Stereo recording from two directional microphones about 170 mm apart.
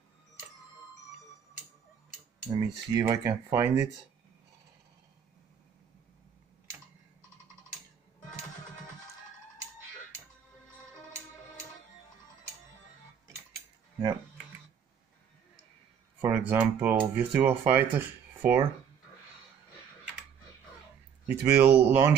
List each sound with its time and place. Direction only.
2.5 s speech: 25° right (ahead or behind)
16.3 s speech: 10° right (ahead or behind)
21.3 s speech: 10° right (ahead or behind)